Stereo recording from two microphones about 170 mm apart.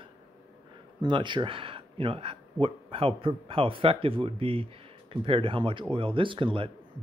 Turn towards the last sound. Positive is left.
turn(degrees=-30)  # may be behind; listen again after turning